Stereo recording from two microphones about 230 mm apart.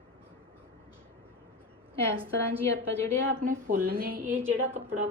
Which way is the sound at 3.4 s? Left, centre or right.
Right.